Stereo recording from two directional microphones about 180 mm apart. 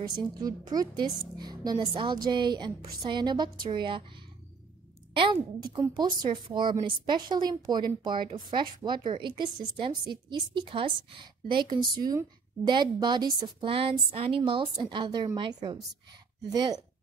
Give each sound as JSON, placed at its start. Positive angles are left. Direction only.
{"t": 0.0, "sound": "a woman's voice", "side_deg": -20}
{"t": 5.1, "sound": "a woman's voice", "side_deg": -25}